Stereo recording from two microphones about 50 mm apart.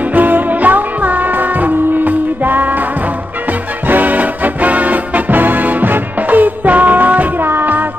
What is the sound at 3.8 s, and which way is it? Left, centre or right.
Music, right.